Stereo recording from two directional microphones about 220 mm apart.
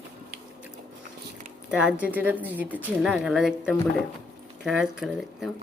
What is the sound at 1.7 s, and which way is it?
A woman's voice, 5° right (ahead or behind).